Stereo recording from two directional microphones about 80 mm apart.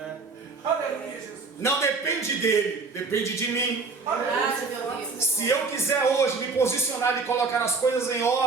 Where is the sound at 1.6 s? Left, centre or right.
Left.